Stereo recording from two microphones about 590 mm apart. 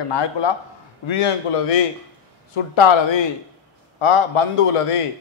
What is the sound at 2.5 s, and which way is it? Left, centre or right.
A man's voice, left.